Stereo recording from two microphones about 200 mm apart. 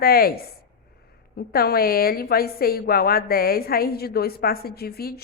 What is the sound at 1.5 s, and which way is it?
A woman's voice, 50° left (ahead or behind).